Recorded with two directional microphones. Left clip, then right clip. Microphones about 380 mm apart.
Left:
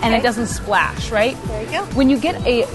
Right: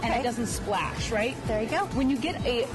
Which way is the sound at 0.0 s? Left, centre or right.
Left.